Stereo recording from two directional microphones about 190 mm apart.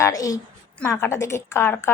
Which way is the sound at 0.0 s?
20° left (ahead or behind).